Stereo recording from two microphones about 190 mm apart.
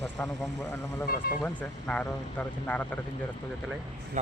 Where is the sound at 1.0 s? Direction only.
50° left (ahead or behind).